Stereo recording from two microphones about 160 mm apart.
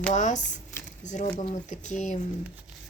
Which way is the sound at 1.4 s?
45° left (ahead or behind).